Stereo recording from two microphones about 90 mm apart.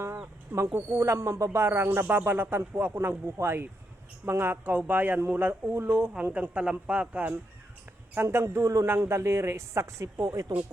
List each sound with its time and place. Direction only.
0.0 s speech: 30° right (ahead or behind)
8.1 s speech: 25° right (ahead or behind)